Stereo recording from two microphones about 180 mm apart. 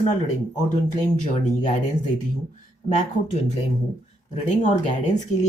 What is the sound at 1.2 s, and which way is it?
Speech, 40° left (ahead or behind).